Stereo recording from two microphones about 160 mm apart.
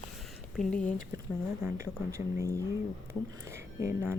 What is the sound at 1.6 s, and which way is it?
Speech, 20° right (ahead or behind).